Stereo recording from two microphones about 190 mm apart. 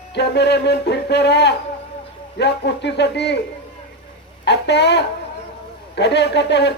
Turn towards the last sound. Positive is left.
turn(degrees=65)  # may be behind; listen again after turning